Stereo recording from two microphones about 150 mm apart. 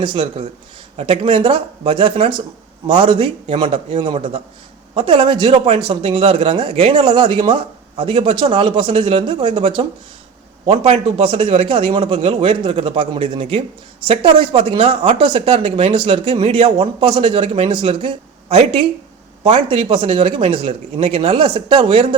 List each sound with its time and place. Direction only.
0.0 s speech: 35° right (ahead or behind)
10.8 s speech: 40° right (ahead or behind)